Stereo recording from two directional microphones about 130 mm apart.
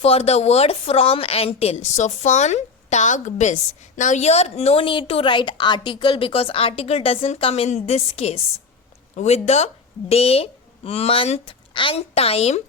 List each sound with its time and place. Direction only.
0.0 s a woman's voice: 55° left (ahead or behind)